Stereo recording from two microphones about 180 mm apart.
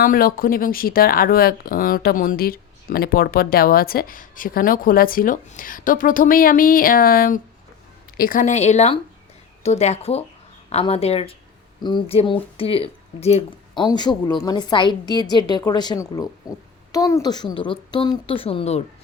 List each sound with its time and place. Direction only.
0.0 s speech: 55° left (ahead or behind); by 13.4 s 35° left (ahead or behind)
13.7 s a woman's voice: 25° left (ahead or behind)